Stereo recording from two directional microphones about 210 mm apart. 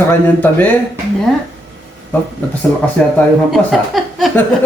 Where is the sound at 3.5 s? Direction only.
Centre (ahead or behind).